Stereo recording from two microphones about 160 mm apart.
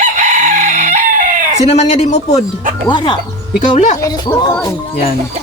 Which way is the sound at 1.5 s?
45° left (ahead or behind).